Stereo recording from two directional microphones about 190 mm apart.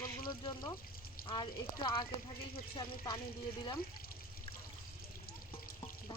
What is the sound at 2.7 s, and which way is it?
Speech, 25° left (ahead or behind).